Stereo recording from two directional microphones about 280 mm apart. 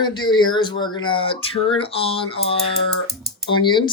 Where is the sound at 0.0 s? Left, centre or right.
Centre.